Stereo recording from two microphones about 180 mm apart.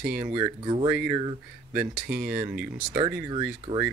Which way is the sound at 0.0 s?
5° right (ahead or behind).